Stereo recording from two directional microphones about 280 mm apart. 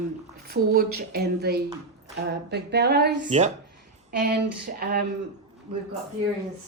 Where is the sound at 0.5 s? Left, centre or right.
Right.